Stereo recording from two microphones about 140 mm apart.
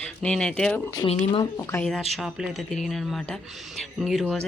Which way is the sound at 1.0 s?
40° left (ahead or behind).